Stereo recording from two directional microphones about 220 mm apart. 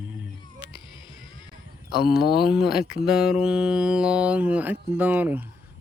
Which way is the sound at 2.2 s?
45° left (ahead or behind).